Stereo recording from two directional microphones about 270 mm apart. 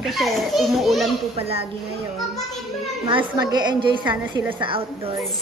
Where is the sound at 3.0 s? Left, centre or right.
Centre.